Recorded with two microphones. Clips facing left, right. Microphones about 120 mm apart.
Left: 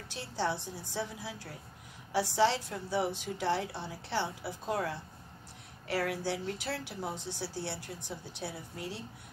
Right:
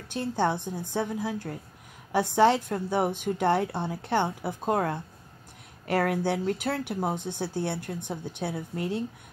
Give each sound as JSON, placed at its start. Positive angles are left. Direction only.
{"t": 0.1, "sound": "a woman's voice", "side_deg": -50}